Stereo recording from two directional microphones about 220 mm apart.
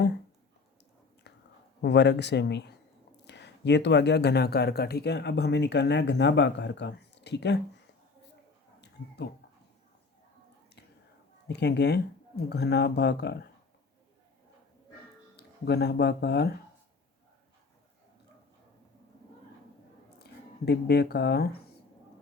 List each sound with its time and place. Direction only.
1.8 s speech: 50° left (ahead or behind)
11.4 s speech: 50° left (ahead or behind)
15.4 s speech: 45° left (ahead or behind)
20.7 s speech: 50° left (ahead or behind)